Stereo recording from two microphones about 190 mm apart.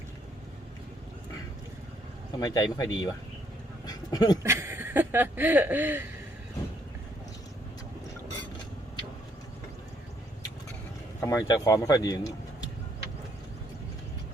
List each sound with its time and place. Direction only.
2.4 s speech: 20° left (ahead or behind)
4.4 s a sound: 15° right (ahead or behind)
11.2 s speech: 15° left (ahead or behind)